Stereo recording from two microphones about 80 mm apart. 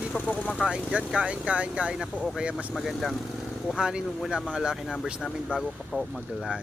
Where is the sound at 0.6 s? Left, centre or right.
Centre.